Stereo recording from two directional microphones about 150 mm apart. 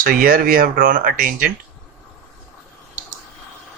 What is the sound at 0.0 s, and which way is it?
Speech, 75° right (ahead or behind).